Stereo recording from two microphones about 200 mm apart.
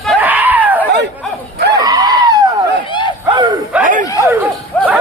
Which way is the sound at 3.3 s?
25° right (ahead or behind).